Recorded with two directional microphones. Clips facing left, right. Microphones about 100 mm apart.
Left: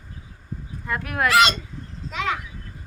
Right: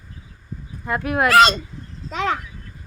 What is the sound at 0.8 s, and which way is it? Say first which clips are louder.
Speech: right 4 dB; 25° right (ahead or behind).